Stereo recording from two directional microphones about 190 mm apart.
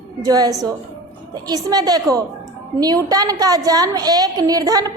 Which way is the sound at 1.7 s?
20° right (ahead or behind).